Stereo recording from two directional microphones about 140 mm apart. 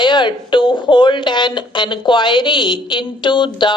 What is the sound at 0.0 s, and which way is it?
Speech, 35° left (ahead or behind).